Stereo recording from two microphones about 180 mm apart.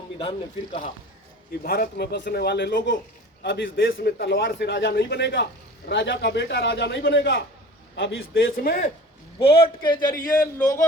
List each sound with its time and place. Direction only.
0.2 s speech: 30° left (ahead or behind)
1.6 s a man's voice: 60° left (ahead or behind); by 3.0 s 75° left (ahead or behind)
3.4 s a man's voice: 85° left; by 5.5 s 70° left (ahead or behind)
5.9 s a man's voice: 80° left
8.5 s speech: 50° left (ahead or behind)
9.4 s speech: 30° left (ahead or behind)